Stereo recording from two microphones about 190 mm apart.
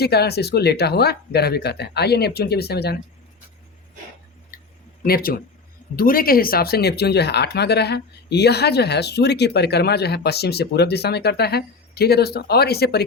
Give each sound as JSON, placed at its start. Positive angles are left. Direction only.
{"t": 0.0, "sound": "speech", "side_deg": 60}
{"t": 4.5, "sound": "a sound", "side_deg": 50}
{"t": 5.0, "sound": "speech", "side_deg": 50}